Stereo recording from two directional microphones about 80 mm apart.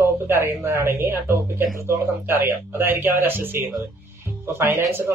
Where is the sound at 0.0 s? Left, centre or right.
Right.